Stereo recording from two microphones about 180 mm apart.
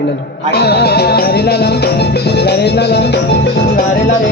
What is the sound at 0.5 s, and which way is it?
Music, 65° left (ahead or behind).